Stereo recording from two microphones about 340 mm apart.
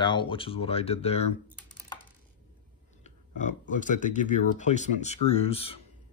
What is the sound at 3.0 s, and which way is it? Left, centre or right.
Speech, left.